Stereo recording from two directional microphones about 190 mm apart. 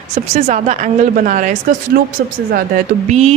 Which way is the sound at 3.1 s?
35° right (ahead or behind).